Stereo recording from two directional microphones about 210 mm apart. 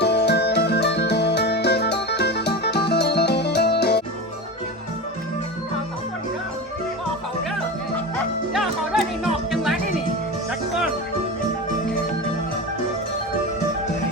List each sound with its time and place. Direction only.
0.0 s music: 55° left (ahead or behind)
8.5 s music: centre (ahead or behind)